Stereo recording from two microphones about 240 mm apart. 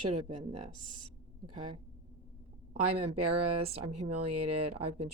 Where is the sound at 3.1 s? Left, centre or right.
Right.